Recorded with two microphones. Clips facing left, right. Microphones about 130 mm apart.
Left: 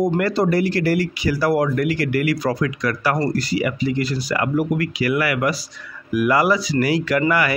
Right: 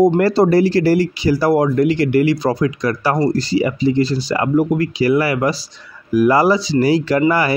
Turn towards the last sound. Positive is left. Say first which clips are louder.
# right 4 dB
turn(degrees=-30)  # may be behind; listen again after turning